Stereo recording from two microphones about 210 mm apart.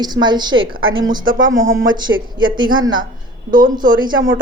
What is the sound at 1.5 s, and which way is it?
Speech, 65° right (ahead or behind).